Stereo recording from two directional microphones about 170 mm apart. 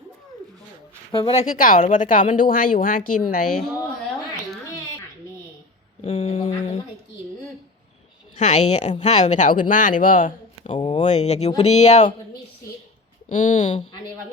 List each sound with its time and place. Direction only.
1.1 s speech: 30° left (ahead or behind)
1.5 s speech: 55° left (ahead or behind)
6.0 s speech: 35° left (ahead or behind)
8.4 s speech: 45° left (ahead or behind)
10.7 s speech: 30° left (ahead or behind)
11.0 s speech: 40° left (ahead or behind)
13.2 s speech: 45° left (ahead or behind)